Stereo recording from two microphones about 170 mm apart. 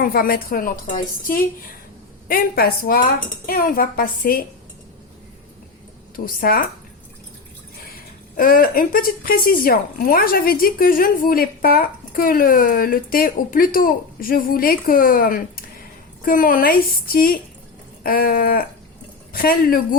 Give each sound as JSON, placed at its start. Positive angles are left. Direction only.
{"t": 0.0, "sound": "speech", "side_deg": 60}
{"t": 6.1, "sound": "speech", "side_deg": 60}
{"t": 8.4, "sound": "speech", "side_deg": 55}